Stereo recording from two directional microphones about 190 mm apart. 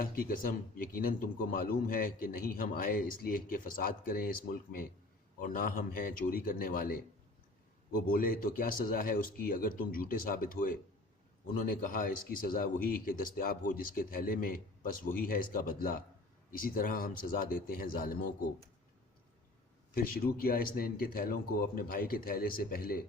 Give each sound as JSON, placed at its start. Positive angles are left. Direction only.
{"t": 0.0, "sound": "a man's voice", "side_deg": 50}
{"t": 8.0, "sound": "a man's voice", "side_deg": 50}
{"t": 19.9, "sound": "a man's voice", "side_deg": 50}